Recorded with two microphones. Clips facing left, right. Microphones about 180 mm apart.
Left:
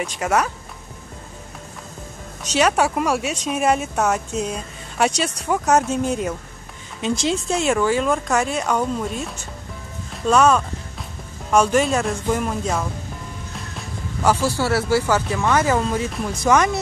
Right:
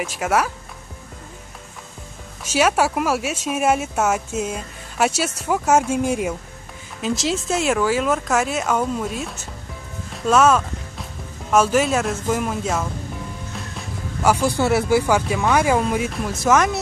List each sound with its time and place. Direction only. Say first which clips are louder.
0.0 s speech: even; 5° right (ahead or behind)
2.4 s speech: even; 5° right (ahead or behind)
10.1 s music: even; centre (ahead or behind)
11.5 s speech: even; 5° right (ahead or behind)
13.7 s music: left 1 dB; 10° right (ahead or behind)
14.5 s speech: right 2 dB; 15° right (ahead or behind); by 16.8 s centre (ahead or behind)